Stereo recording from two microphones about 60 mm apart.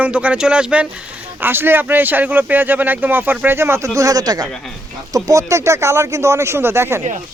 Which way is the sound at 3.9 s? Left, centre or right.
Right.